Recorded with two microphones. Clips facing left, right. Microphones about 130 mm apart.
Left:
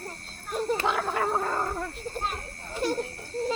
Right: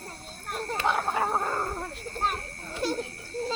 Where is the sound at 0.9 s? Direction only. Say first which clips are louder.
Even; 75° left (ahead or behind).